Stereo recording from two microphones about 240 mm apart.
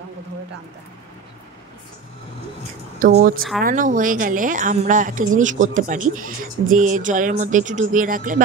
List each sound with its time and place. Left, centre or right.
3.0 s speech: right